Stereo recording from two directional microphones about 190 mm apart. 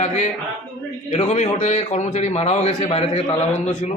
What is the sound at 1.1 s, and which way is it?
A man's voice, 35° left (ahead or behind).